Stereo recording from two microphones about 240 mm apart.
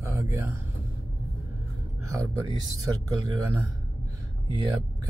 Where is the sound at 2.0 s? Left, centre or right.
Centre.